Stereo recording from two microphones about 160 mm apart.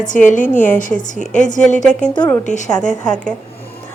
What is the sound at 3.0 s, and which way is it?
Speech, 5° left (ahead or behind).